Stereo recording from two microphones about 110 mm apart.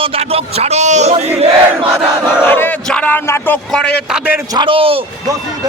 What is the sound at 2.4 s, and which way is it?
Battle cry, 20° left (ahead or behind).